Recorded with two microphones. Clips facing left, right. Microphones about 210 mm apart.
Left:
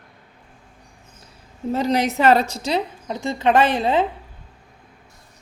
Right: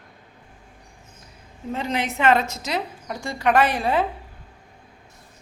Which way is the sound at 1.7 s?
40° left (ahead or behind).